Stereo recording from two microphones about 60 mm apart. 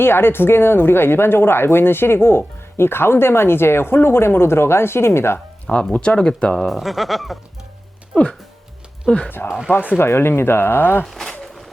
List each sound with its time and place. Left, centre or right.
0.0 s a woman's voice: left
5.6 s speech: centre
6.7 s speech: centre
9.0 s speech: centre
9.3 s a woman's voice: left
11.0 s speech: centre